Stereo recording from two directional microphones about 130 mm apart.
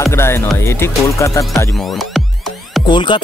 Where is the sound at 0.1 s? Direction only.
20° left (ahead or behind).